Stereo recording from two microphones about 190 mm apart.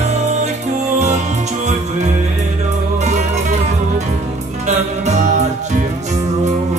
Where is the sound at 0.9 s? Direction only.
35° right (ahead or behind).